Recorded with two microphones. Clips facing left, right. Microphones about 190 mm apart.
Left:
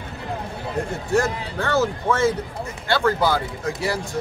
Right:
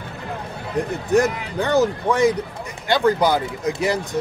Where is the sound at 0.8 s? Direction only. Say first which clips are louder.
Right 4 dB; 15° right (ahead or behind).